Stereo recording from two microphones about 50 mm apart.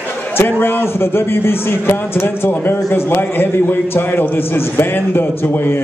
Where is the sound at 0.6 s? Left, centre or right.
Left.